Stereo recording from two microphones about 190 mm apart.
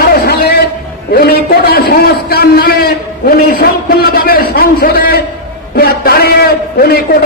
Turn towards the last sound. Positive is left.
turn(degrees=50)  # may be behind; listen again after turning